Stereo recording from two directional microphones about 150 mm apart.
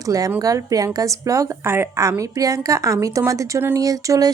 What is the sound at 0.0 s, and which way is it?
A woman's voice, 20° right (ahead or behind).